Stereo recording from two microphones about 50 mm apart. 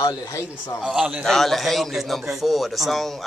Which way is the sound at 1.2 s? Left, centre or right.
Centre.